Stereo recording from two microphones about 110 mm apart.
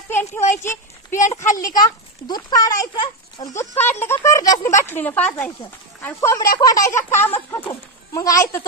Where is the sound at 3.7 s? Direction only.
20° left (ahead or behind).